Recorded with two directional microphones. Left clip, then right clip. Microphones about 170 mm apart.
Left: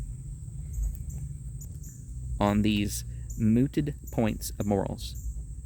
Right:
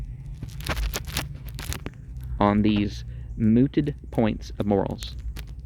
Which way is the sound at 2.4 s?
30° left (ahead or behind).